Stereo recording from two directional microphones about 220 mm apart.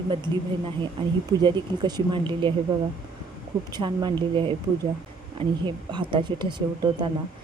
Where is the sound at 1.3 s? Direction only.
20° right (ahead or behind).